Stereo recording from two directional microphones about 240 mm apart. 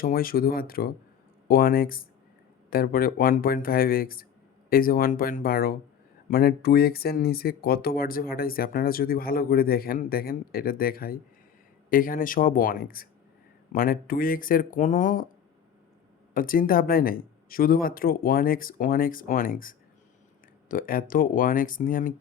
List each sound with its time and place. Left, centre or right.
0.0 s speech: left
16.3 s speech: left